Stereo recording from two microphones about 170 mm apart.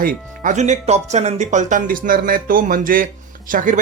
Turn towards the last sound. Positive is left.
turn(degrees=-50)  # may be behind; listen again after turning